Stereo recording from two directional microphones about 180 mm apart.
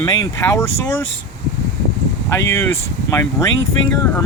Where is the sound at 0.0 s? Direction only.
20° left (ahead or behind).